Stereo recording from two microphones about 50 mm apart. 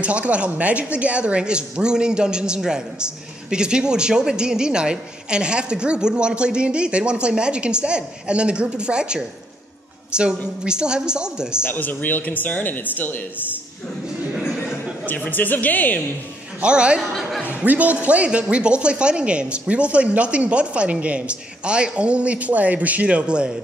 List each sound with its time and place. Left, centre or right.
0.0 s a woman's voice: right
11.6 s a woman's voice: left
15.0 s a woman's voice: left
16.6 s a woman's voice: right